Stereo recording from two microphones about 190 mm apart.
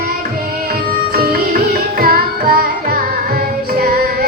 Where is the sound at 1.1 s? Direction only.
50° right (ahead or behind).